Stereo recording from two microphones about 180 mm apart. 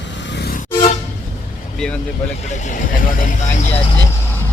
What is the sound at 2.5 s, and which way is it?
Speech, 40° left (ahead or behind).